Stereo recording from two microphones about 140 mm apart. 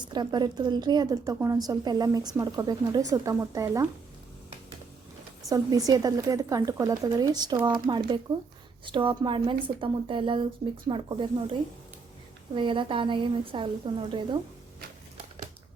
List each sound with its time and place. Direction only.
0.1 s a woman's voice: 30° right (ahead or behind)
5.5 s a woman's voice: 25° right (ahead or behind)
12.5 s a woman's voice: 35° right (ahead or behind)